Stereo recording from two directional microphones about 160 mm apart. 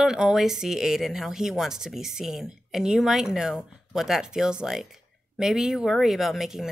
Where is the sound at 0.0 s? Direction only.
5° right (ahead or behind).